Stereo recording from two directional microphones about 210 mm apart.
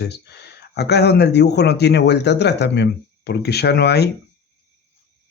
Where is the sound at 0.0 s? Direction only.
50° left (ahead or behind).